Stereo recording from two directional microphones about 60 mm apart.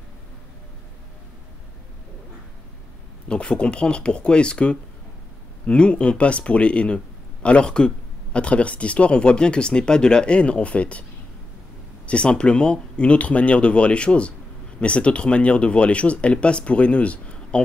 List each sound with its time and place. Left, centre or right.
3.3 s speech: centre
12.1 s speech: centre